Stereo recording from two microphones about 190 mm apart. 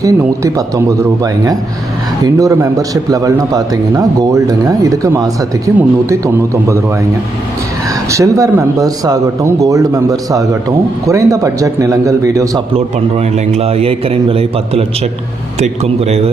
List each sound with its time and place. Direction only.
0.0 s a man's voice: 15° right (ahead or behind)
8.1 s a man's voice: 15° right (ahead or behind)
12.7 s a man's voice: 35° right (ahead or behind)